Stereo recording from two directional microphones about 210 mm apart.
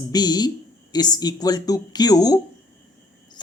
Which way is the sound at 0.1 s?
20° left (ahead or behind).